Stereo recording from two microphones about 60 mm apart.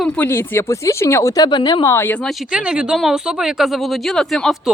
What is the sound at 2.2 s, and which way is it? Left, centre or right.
Speech, centre.